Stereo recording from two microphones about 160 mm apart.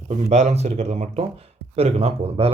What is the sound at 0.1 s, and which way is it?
Speech, 45° right (ahead or behind).